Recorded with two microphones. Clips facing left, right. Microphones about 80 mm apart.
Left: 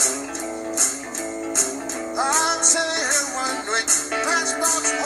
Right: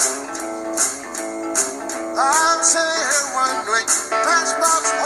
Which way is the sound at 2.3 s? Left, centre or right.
Right.